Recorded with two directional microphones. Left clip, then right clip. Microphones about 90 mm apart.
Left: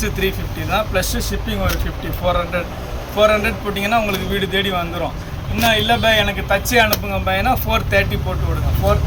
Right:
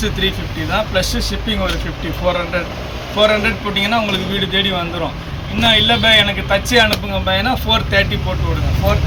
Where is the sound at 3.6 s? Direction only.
20° left (ahead or behind).